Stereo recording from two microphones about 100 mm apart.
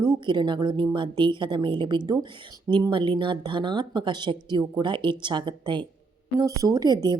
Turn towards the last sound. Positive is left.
turn(degrees=-40)  # may be behind; listen again after turning